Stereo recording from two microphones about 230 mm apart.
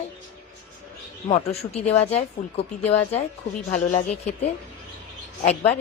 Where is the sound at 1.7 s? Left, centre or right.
Left.